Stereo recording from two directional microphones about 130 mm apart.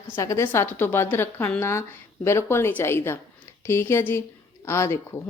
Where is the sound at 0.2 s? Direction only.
25° left (ahead or behind).